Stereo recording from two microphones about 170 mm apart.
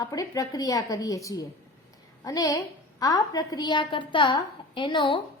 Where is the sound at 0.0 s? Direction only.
20° left (ahead or behind).